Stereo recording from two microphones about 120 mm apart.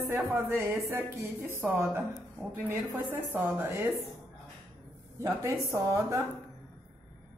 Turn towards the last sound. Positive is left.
turn(degrees=-25)  # may be behind; listen again after turning